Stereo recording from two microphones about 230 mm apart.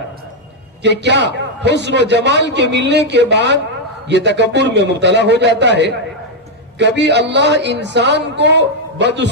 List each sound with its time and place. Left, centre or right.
0.8 s a man's voice: right